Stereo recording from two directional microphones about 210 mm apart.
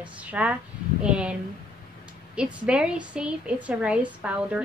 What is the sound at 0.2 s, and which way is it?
A woman's voice, 5° right (ahead or behind).